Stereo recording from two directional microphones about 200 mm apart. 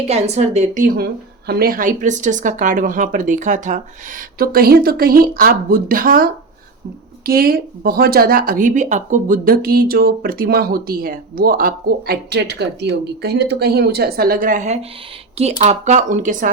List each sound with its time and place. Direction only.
0.1 s speech: 30° right (ahead or behind)
7.3 s speech: 50° right (ahead or behind)